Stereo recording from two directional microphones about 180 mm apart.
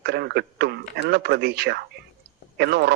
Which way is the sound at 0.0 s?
65° right (ahead or behind).